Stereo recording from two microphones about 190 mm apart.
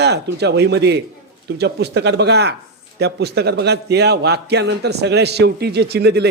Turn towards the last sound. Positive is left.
turn(degrees=-60)  # may be behind; listen again after turning